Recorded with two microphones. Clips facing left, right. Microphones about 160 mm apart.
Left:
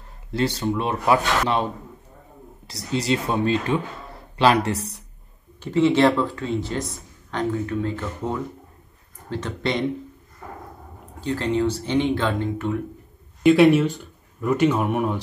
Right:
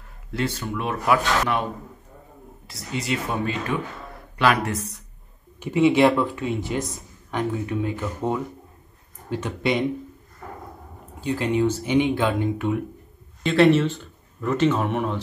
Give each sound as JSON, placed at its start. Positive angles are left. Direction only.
{"t": 0.6, "sound": "speech", "side_deg": 25}
{"t": 5.6, "sound": "speech", "side_deg": -15}
{"t": 11.1, "sound": "speech", "side_deg": -15}
{"t": 13.4, "sound": "speech", "side_deg": 5}